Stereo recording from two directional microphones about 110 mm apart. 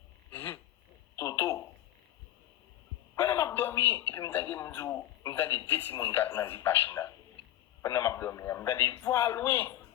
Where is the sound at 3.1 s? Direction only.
30° left (ahead or behind).